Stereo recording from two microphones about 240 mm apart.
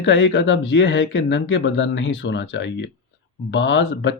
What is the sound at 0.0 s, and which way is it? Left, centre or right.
Speech, left.